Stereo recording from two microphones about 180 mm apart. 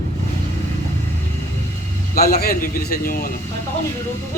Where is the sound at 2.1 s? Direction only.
55° left (ahead or behind).